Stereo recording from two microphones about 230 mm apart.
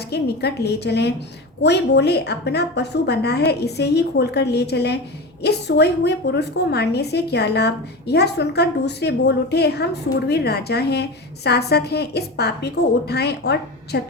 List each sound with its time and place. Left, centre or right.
0.1 s a woman's voice: left